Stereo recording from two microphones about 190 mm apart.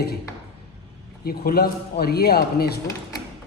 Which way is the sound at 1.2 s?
50° left (ahead or behind).